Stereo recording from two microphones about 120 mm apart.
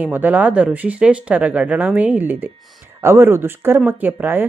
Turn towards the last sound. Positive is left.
turn(degrees=-15)  # may be behind; listen again after turning